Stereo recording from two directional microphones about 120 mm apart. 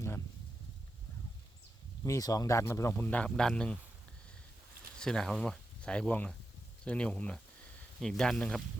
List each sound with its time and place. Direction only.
2.0 s speech: 30° left (ahead or behind); by 3.8 s 10° left (ahead or behind)
4.9 s speech: 5° left (ahead or behind)